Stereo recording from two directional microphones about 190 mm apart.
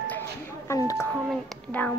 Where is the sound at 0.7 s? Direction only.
15° left (ahead or behind).